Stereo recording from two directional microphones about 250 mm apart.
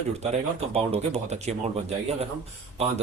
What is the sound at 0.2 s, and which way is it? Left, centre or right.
Speech, right.